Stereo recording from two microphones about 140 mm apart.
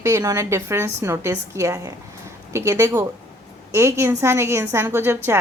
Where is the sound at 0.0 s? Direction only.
20° right (ahead or behind).